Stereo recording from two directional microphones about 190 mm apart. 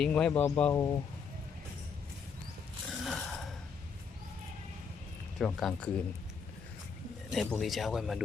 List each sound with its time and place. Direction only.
0.0 s speech: 5° left (ahead or behind)
2.9 s a sound: centre (ahead or behind)
5.4 s speech: centre (ahead or behind)
7.3 s speech: centre (ahead or behind)